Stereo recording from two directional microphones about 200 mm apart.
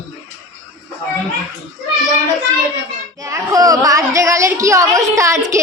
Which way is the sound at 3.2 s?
15° right (ahead or behind).